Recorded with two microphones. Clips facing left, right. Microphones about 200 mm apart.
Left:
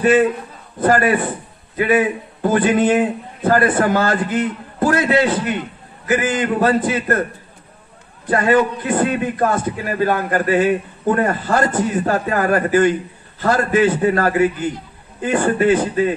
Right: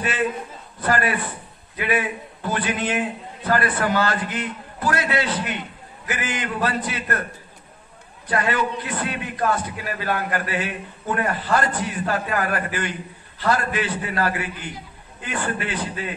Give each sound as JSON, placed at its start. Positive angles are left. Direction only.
{"t": 0.7, "sound": "a man's voice", "side_deg": 45}
{"t": 8.3, "sound": "a man's voice", "side_deg": 45}